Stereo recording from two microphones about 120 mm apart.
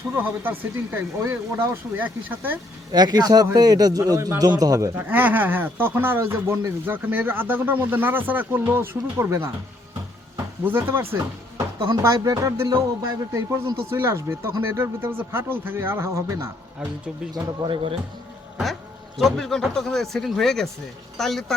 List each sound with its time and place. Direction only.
0.2 s speech: 15° right (ahead or behind)
2.9 s a man's voice: 35° right (ahead or behind)
10.3 s a sound: 20° right (ahead or behind)
12.0 s speech: 25° right (ahead or behind)
17.3 s a man's voice: 40° right (ahead or behind)
18.6 s speech: centre (ahead or behind)